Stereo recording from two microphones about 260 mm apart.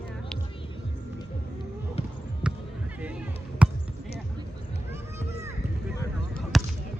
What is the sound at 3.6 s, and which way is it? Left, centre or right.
Basketball bounce, centre.